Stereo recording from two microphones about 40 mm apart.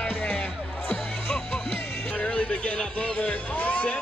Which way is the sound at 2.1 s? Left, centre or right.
Left.